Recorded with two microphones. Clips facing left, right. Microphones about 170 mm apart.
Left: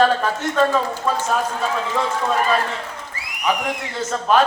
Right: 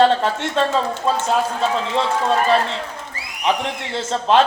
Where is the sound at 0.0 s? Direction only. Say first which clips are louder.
Right 2 dB; 25° right (ahead or behind).